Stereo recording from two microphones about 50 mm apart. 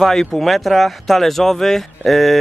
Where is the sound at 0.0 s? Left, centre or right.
Centre.